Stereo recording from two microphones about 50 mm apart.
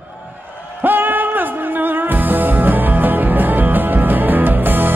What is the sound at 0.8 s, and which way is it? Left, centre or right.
Music, right.